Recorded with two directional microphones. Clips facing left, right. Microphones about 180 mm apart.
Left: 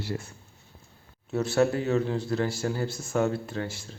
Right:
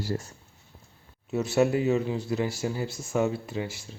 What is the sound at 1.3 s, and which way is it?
Speech, 10° right (ahead or behind).